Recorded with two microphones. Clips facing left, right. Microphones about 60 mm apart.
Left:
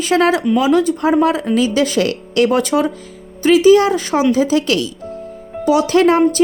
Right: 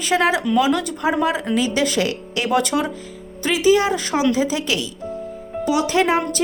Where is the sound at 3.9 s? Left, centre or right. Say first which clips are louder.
Left 4 dB; left.